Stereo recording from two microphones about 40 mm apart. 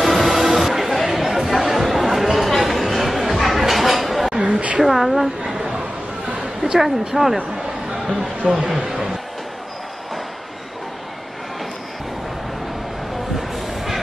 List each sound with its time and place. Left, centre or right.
0.0 s music: centre
4.4 s a sound: right
4.7 s a woman's voice: centre
13.4 s music: centre